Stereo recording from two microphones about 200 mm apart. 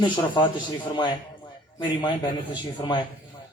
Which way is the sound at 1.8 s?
20° left (ahead or behind).